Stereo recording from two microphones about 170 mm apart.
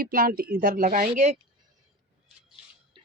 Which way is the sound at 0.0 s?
60° right (ahead or behind).